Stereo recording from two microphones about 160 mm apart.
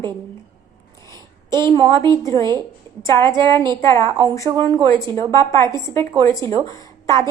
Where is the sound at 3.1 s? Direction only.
30° right (ahead or behind).